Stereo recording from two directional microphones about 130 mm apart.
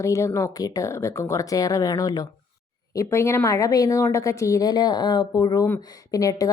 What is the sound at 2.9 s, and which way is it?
A woman's voice, 20° left (ahead or behind).